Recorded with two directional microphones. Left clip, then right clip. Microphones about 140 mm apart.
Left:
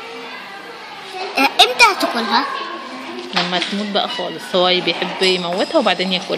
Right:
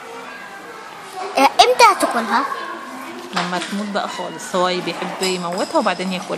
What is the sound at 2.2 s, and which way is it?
Speech, 40° right (ahead or behind).